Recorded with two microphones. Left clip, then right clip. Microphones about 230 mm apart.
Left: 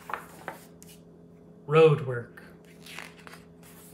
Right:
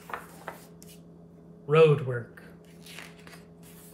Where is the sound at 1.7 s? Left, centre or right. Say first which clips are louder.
Even; centre.